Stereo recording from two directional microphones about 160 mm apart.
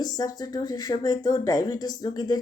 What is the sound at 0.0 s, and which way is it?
Speech, 25° left (ahead or behind).